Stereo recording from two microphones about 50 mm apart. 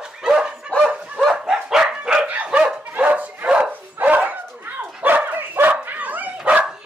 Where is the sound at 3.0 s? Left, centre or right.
Right.